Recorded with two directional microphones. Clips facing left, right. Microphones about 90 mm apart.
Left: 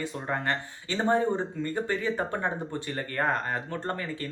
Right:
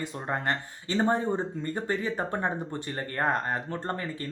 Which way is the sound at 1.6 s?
30° right (ahead or behind).